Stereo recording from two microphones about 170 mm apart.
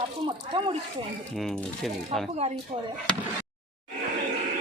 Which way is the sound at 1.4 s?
Centre (ahead or behind).